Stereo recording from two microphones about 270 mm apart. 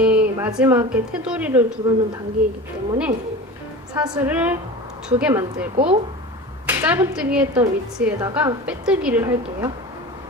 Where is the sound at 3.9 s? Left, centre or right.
Centre.